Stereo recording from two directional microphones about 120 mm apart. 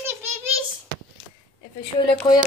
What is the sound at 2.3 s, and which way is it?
Speech, 40° left (ahead or behind).